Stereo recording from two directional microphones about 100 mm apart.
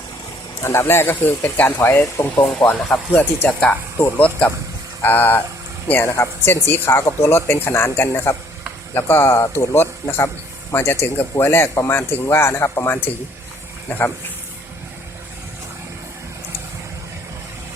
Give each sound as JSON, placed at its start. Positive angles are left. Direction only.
{"t": 0.6, "sound": "speech", "side_deg": 25}